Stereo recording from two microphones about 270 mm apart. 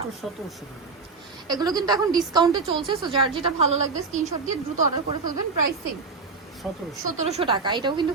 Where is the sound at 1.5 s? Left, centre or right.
Centre.